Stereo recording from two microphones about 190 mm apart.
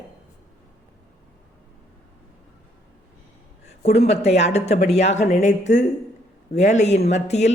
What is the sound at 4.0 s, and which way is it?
Speech, 35° left (ahead or behind).